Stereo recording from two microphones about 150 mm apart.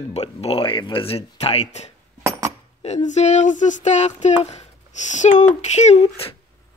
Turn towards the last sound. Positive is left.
turn(degrees=40)  # may be behind; listen again after turning